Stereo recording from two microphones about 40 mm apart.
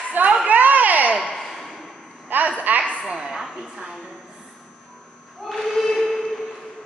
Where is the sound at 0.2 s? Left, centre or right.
Right.